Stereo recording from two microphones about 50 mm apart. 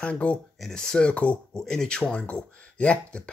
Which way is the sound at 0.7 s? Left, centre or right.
Centre.